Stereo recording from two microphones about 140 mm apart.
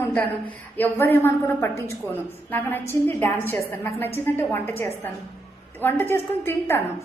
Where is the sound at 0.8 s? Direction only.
15° left (ahead or behind).